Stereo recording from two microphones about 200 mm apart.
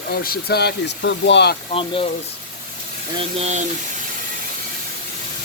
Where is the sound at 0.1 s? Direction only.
50° left (ahead or behind).